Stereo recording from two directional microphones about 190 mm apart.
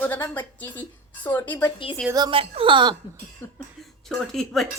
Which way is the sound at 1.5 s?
15° left (ahead or behind).